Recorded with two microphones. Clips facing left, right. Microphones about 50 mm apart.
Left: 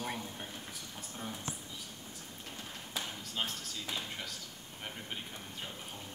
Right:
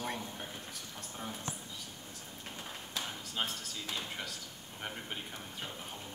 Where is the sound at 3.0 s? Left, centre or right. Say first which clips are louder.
Right 1 dB; centre.